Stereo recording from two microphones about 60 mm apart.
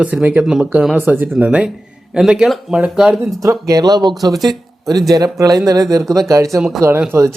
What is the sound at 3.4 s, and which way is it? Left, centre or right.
Speech, right.